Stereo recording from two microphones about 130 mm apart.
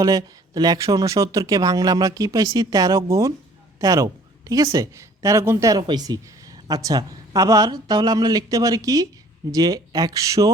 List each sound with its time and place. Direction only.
0.0 s a woman's voice: 30° right (ahead or behind)